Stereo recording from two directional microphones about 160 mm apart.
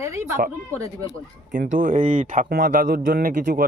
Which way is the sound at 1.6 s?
55° right (ahead or behind).